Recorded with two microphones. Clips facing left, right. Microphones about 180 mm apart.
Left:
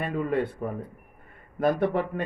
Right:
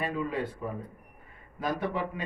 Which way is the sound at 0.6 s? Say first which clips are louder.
Left 4 dB; 50° left (ahead or behind).